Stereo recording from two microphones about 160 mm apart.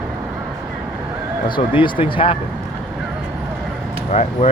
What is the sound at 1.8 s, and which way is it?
Speech, 30° left (ahead or behind).